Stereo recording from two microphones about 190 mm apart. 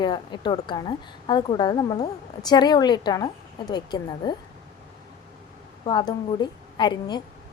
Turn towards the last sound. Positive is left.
turn(degrees=25)  # may be behind; listen again after turning